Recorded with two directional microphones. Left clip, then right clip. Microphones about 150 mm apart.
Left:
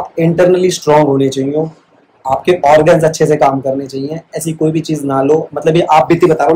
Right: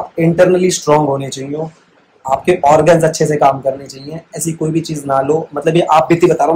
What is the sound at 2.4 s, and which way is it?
Speech, 5° left (ahead or behind).